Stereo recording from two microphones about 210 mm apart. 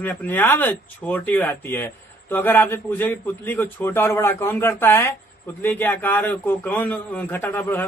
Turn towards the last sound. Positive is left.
turn(degrees=10)  # may be behind; listen again after turning